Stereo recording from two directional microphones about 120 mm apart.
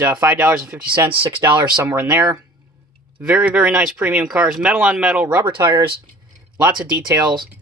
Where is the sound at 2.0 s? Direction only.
15° right (ahead or behind).